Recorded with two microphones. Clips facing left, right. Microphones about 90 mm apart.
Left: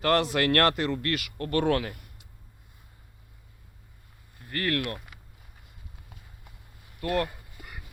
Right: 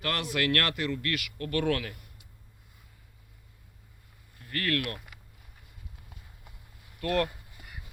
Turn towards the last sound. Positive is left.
turn(degrees=10)  # may be behind; listen again after turning